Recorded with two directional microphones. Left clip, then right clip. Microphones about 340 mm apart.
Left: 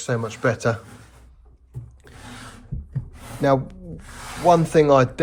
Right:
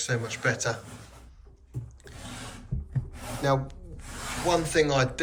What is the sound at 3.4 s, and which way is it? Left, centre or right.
Speech, left.